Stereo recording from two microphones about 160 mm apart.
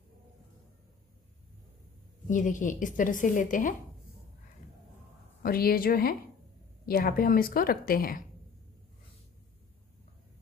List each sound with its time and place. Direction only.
2.2 s a woman's voice: 55° left (ahead or behind)
5.4 s a woman's voice: 70° left (ahead or behind)